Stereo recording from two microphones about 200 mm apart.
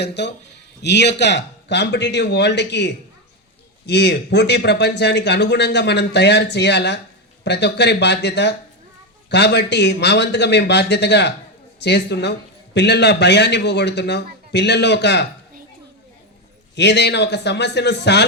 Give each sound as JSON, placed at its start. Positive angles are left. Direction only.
{"t": 0.0, "sound": "a man's voice", "side_deg": 60}
{"t": 16.7, "sound": "a man's voice", "side_deg": 60}